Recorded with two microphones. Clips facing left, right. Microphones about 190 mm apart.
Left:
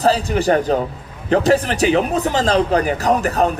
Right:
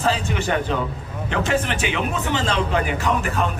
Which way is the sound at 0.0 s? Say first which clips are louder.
Left 6 dB; 35° left (ahead or behind).